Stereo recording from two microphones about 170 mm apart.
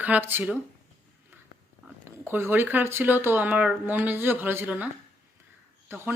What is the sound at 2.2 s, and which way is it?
Speech, 15° right (ahead or behind).